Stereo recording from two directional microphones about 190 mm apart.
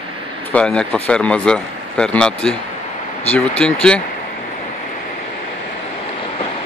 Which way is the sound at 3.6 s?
5° left (ahead or behind).